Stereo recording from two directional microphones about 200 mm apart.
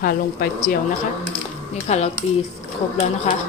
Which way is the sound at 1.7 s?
35° left (ahead or behind).